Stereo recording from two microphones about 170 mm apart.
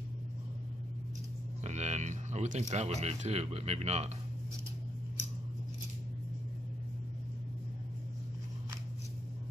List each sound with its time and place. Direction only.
1.6 s speech: 40° right (ahead or behind)